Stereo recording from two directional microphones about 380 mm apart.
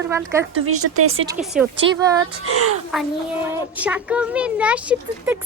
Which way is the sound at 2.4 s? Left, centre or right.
Right.